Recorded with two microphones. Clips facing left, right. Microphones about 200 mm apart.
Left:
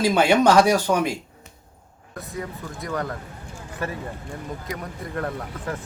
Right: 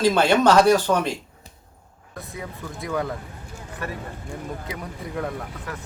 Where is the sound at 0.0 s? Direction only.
10° left (ahead or behind).